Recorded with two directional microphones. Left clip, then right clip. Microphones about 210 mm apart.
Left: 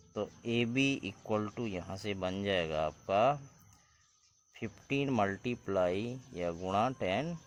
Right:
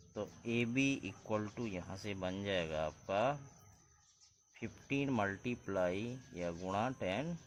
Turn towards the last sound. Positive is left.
turn(degrees=45)  # may be behind; listen again after turning